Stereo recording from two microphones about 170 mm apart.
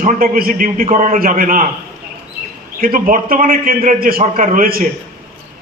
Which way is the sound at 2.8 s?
55° right (ahead or behind).